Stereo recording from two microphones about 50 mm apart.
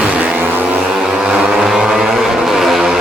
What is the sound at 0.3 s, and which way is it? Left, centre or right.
Music, right.